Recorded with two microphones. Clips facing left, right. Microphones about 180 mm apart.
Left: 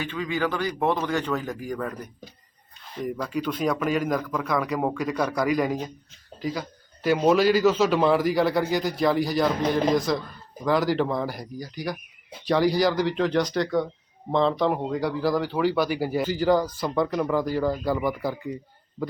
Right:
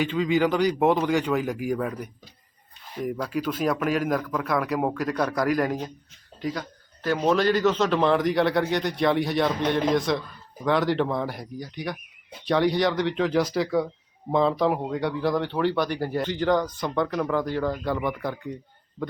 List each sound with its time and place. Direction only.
0.0 s a man's voice: 20° right (ahead or behind); by 19.0 s 5° left (ahead or behind)